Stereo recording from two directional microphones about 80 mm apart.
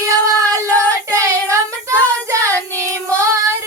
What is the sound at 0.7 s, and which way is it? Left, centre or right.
Child singing, right.